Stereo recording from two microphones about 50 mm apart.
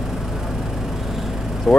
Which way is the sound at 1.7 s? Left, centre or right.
Centre.